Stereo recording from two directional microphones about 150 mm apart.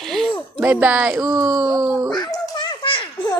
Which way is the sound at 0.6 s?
15° right (ahead or behind).